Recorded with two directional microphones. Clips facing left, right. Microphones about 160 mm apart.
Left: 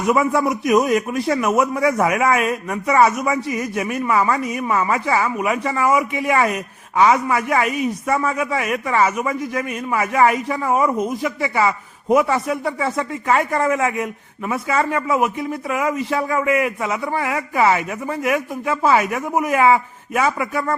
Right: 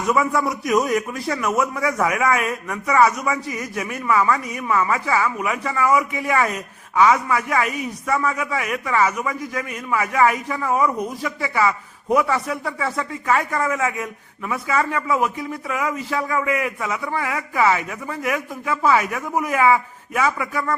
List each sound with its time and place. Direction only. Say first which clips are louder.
0.0 s a man's voice: left 3 dB; 20° left (ahead or behind)